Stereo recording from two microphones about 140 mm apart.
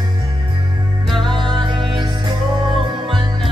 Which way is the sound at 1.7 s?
35° right (ahead or behind).